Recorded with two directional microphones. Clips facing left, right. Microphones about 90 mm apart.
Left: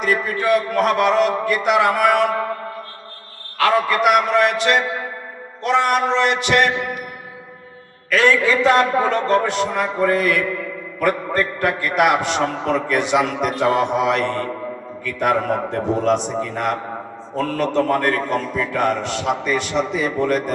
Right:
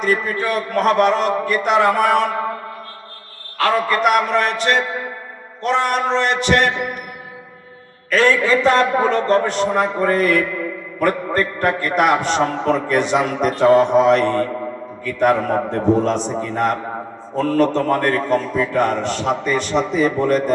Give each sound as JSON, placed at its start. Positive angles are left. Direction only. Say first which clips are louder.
{"t": 0.0, "sound": "a man's voice", "louder": "even", "side_deg": -40}
{"t": 3.6, "sound": "a man's voice", "louder": "even", "side_deg": -40}
{"t": 8.1, "sound": "a man's voice", "louder": "right 1 dB", "side_deg": -40}